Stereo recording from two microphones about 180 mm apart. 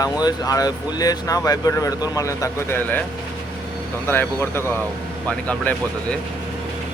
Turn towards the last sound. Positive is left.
turn(degrees=5)  # may be behind; listen again after turning